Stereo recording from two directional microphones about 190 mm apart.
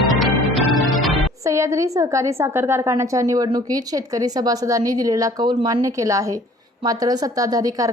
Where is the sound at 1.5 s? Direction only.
15° right (ahead or behind).